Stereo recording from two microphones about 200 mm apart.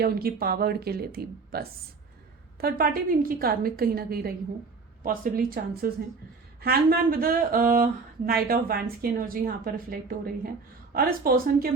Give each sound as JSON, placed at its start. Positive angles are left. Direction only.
{"t": 0.0, "sound": "a woman's voice", "side_deg": -50}